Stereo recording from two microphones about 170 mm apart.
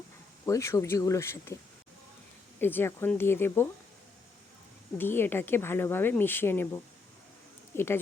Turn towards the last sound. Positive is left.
turn(degrees=15)  # may be behind; listen again after turning